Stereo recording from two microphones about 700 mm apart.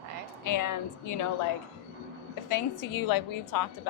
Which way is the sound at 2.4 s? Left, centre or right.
Left.